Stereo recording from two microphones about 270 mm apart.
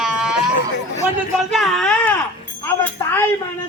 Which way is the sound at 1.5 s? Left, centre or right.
Centre.